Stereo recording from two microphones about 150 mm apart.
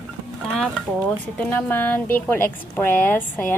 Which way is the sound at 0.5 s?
5° left (ahead or behind).